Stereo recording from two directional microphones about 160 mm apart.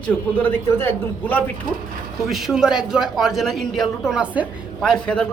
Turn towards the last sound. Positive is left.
turn(degrees=5)  # may be behind; listen again after turning